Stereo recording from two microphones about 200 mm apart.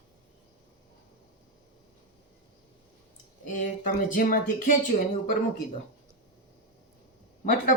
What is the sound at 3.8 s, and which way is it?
Speech, 45° left (ahead or behind).